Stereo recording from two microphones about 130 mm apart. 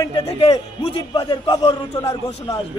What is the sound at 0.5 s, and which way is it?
A man's voice, 30° left (ahead or behind).